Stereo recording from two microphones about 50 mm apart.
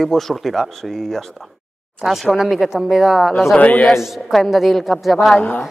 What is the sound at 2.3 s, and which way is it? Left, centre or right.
A woman's voice, centre.